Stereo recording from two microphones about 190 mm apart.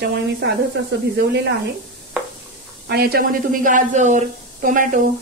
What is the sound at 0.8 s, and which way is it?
Speech, 60° right (ahead or behind).